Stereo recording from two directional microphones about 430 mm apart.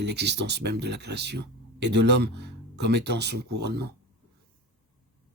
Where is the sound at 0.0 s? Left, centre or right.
Right.